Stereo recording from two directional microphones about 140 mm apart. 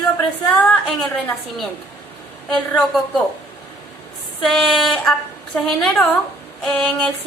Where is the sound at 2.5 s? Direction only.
5° left (ahead or behind).